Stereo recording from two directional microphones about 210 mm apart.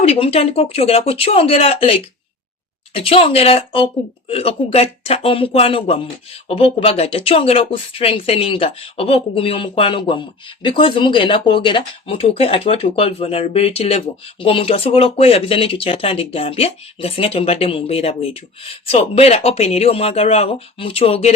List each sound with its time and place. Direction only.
0.0 s speech: 30° left (ahead or behind)